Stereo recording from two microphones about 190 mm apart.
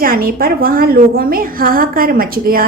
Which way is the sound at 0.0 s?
50° right (ahead or behind).